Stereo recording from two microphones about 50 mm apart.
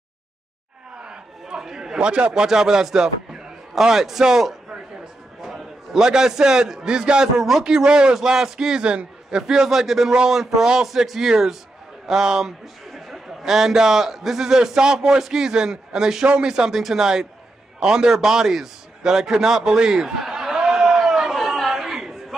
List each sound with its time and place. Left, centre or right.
0.9 s chatter: centre
2.0 s a man's voice: right
17.7 s a sound: centre